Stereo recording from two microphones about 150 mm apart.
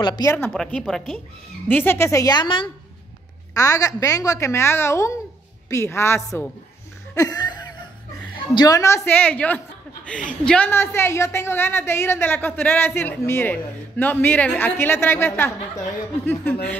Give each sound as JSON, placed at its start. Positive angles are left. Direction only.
{"t": 0.0, "sound": "a woman's voice", "side_deg": 25}
{"t": 0.5, "sound": "a woman's voice", "side_deg": 5}
{"t": 1.7, "sound": "a woman's voice", "side_deg": 15}
{"t": 3.5, "sound": "a woman's voice", "side_deg": 20}
{"t": 7.2, "sound": "a sound", "side_deg": 25}
{"t": 8.5, "sound": "a woman's voice", "side_deg": 20}